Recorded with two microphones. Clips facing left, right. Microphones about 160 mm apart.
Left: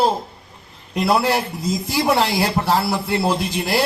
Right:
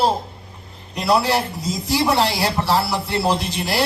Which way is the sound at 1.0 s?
50° left (ahead or behind).